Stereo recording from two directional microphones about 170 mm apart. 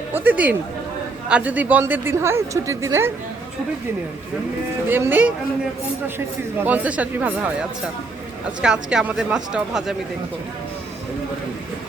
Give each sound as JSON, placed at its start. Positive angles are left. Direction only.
{"t": 0.1, "sound": "speech", "side_deg": -10}
{"t": 4.9, "sound": "speech", "side_deg": -10}
{"t": 8.6, "sound": "speech", "side_deg": -5}